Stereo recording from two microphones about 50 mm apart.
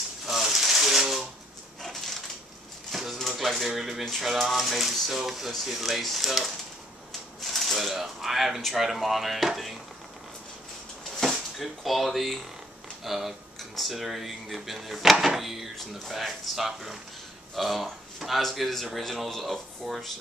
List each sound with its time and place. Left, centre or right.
0.3 s a sound: centre
4.0 s speech: centre
11.2 s speech: centre
15.7 s speech: centre
16.1 s speech: centre